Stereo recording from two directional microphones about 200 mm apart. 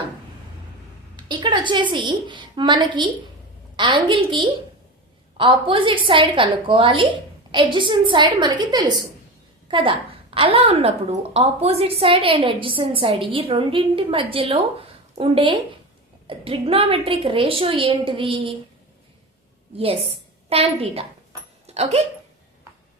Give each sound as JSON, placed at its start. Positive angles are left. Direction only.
{"t": 1.1, "sound": "a woman's voice", "side_deg": -20}
{"t": 19.7, "sound": "a woman's voice", "side_deg": -30}